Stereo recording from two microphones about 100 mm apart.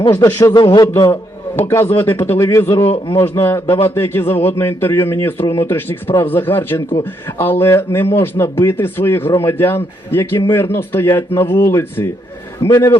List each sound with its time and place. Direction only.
0.1 s a man's voice: 25° left (ahead or behind)
0.5 s a man's voice: 50° left (ahead or behind)
1.5 s a man's voice: 30° left (ahead or behind)